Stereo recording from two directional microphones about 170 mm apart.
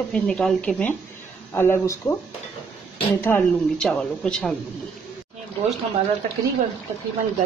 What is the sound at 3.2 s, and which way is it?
Speech, 10° left (ahead or behind).